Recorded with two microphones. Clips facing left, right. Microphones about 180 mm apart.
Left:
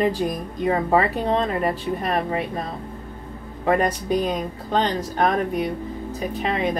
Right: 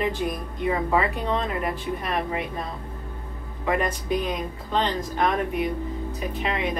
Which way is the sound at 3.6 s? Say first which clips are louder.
Left 4 dB; 40° left (ahead or behind).